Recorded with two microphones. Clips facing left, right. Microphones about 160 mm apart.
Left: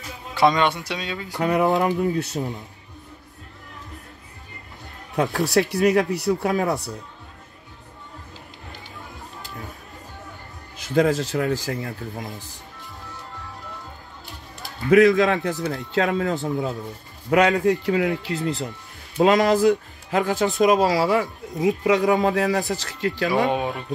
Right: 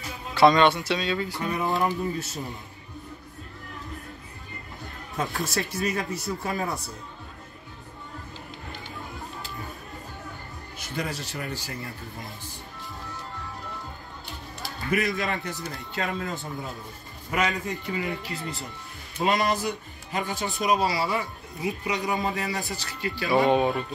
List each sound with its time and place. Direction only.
0.3 s speech: 15° left (ahead or behind)
1.4 s speech: 75° left (ahead or behind)
5.1 s speech: 70° left (ahead or behind)
11.0 s speech: 90° left
14.9 s speech: 90° left
15.6 s speech: 75° left (ahead or behind)
23.5 s speech: 5° left (ahead or behind)